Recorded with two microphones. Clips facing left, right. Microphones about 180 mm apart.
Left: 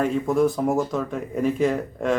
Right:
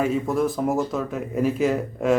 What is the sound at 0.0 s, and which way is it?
Speech, centre (ahead or behind).